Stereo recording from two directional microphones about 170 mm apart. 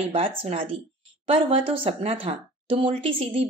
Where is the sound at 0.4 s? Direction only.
35° right (ahead or behind).